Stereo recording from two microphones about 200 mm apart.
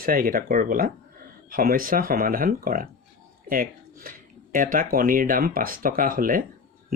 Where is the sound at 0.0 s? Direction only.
45° right (ahead or behind).